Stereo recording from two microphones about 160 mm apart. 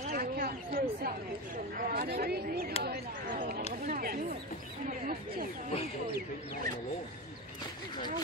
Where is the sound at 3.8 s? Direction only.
65° right (ahead or behind).